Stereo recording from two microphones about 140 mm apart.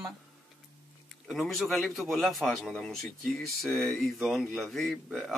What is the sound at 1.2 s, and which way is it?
A man's voice, centre (ahead or behind).